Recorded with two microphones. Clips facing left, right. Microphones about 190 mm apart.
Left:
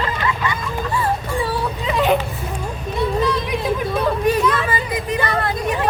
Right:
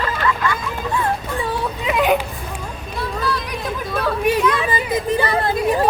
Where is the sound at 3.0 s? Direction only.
20° left (ahead or behind).